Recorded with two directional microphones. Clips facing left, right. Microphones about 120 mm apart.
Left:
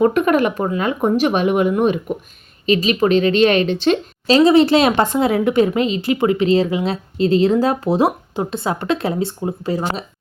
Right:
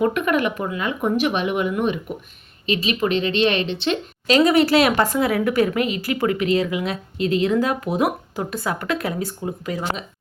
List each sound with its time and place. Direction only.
0.0 s a woman's voice: 40° left (ahead or behind)